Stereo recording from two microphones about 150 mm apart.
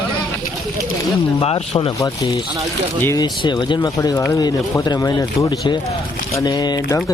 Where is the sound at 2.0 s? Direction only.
20° left (ahead or behind).